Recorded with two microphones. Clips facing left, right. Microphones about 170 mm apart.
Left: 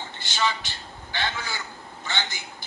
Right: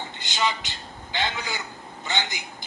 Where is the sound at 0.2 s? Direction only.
15° right (ahead or behind).